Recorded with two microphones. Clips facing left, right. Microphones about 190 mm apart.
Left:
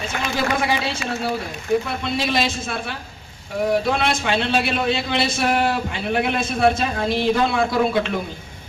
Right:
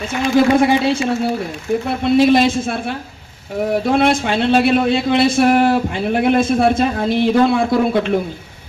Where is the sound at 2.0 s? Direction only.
50° right (ahead or behind).